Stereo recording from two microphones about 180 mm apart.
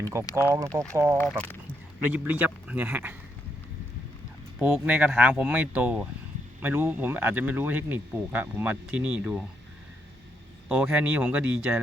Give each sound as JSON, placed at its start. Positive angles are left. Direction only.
{"t": 0.4, "sound": "speech", "side_deg": -15}
{"t": 4.6, "sound": "speech", "side_deg": -10}
{"t": 10.7, "sound": "speech", "side_deg": -10}